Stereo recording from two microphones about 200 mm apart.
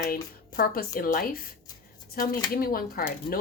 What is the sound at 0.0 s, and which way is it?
A woman's voice, 45° left (ahead or behind).